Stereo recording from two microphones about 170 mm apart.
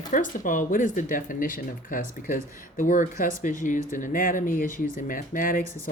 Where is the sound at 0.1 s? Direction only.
50° left (ahead or behind).